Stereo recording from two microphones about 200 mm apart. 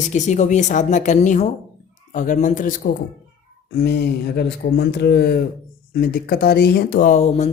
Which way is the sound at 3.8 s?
50° left (ahead or behind).